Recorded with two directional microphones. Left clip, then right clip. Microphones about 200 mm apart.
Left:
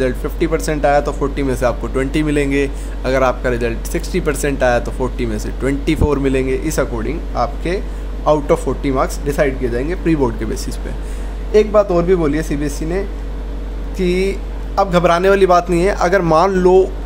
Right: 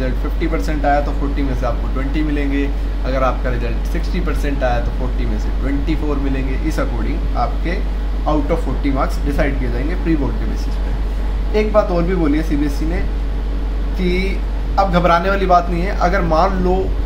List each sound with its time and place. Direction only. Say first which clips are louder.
0.0 s speech: left 5 dB; 55° left (ahead or behind)
5.9 s speech: left 8 dB; 60° left (ahead or behind)